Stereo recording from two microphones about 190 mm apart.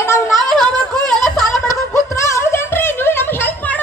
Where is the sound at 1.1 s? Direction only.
Centre (ahead or behind).